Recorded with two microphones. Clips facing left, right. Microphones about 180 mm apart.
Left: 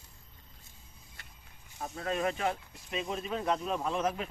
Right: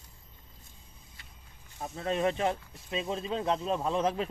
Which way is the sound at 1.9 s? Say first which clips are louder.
Right 3 dB; 25° right (ahead or behind).